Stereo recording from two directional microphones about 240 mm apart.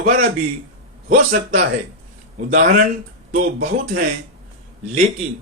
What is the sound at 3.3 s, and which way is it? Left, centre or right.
Speech, right.